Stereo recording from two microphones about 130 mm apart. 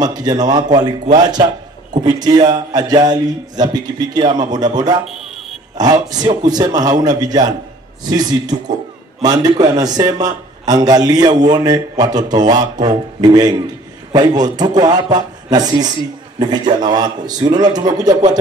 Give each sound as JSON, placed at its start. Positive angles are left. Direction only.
{"t": 0.0, "sound": "a man's voice", "side_deg": -30}
{"t": 5.0, "sound": "a sound", "side_deg": 0}
{"t": 5.8, "sound": "a man's voice", "side_deg": -30}